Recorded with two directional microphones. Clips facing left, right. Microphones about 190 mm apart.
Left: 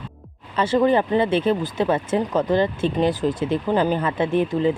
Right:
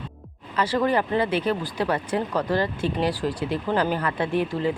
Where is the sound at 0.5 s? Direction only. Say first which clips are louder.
Left 4 dB; 25° left (ahead or behind).